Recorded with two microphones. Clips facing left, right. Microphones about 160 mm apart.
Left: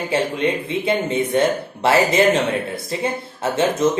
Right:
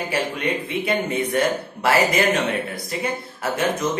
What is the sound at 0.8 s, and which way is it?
Speech, 25° left (ahead or behind).